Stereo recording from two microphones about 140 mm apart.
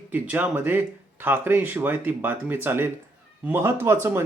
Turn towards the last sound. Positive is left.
turn(degrees=-15)  # may be behind; listen again after turning